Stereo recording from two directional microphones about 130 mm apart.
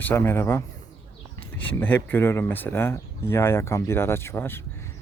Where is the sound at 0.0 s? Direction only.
15° left (ahead or behind).